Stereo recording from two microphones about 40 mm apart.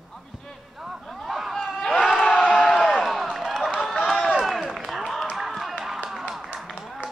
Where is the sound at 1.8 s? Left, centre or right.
Left.